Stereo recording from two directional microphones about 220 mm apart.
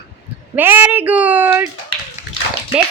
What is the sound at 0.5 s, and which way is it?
A child's voice, 10° right (ahead or behind).